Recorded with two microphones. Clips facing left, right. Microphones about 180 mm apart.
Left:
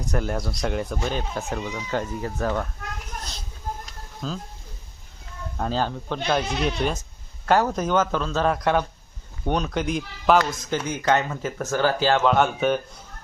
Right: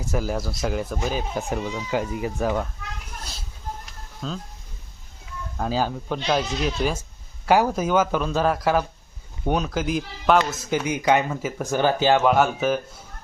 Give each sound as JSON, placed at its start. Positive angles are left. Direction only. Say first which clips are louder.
{"t": 0.0, "sound": "speech", "louder": "right 1 dB", "side_deg": -5}
{"t": 1.4, "sound": "speech", "louder": "right 2 dB", "side_deg": -15}
{"t": 4.2, "sound": "speech", "louder": "even", "side_deg": 0}
{"t": 5.5, "sound": "speech", "louder": "right 1 dB", "side_deg": -5}